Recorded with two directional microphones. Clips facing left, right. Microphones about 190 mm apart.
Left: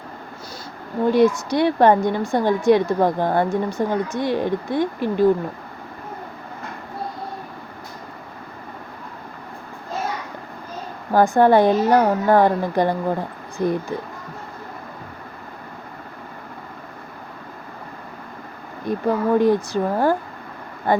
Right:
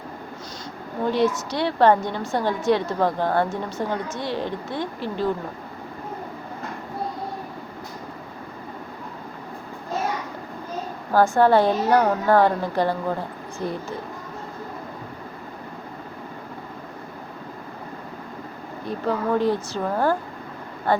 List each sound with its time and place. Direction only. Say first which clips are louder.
1.1 s a woman's voice: left 6 dB; 15° left (ahead or behind)
11.1 s a woman's voice: left 2 dB; 15° left (ahead or behind)
18.9 s a woman's voice: left 4 dB; 15° left (ahead or behind)